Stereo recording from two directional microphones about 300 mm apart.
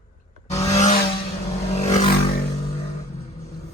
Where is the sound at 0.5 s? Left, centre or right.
Left.